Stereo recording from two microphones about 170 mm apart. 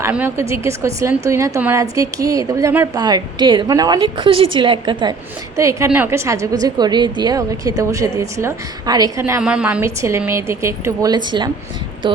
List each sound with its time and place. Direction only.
0.0 s a woman's voice: 10° right (ahead or behind); by 5.1 s 30° right (ahead or behind)
5.5 s a woman's voice: 20° right (ahead or behind)
9.4 s a woman's voice: 5° right (ahead or behind); by 12.2 s 30° right (ahead or behind)